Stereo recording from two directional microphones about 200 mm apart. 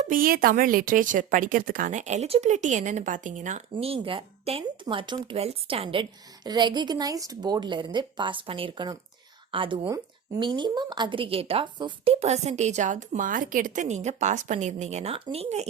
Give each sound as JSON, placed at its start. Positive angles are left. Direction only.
{"t": 0.0, "sound": "a woman's voice", "side_deg": -45}